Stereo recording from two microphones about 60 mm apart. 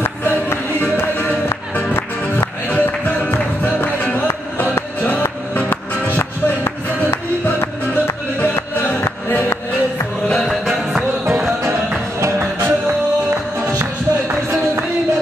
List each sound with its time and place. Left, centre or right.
0.0 s music: left
2.7 s music: left
5.7 s music: left
10.5 s music: centre
12.2 s music: right